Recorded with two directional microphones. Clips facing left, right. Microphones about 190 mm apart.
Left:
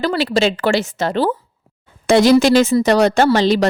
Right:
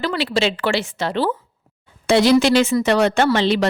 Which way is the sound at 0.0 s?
40° left (ahead or behind).